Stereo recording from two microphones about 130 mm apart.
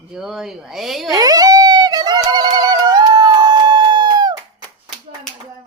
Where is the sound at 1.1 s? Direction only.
30° right (ahead or behind).